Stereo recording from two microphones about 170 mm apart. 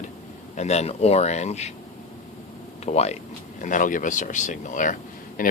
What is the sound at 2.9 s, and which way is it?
Speech, 40° left (ahead or behind).